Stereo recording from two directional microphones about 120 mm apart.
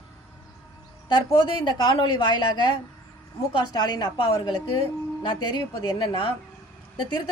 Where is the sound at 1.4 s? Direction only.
45° left (ahead or behind).